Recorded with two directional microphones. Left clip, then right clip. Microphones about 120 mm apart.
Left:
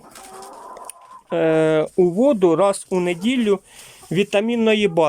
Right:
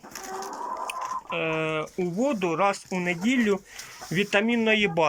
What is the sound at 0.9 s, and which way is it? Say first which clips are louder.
Speech: left 3 dB; 60° left (ahead or behind).